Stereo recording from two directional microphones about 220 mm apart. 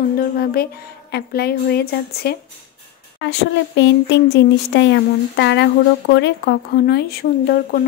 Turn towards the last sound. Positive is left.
turn(degrees=45)  # may be behind; listen again after turning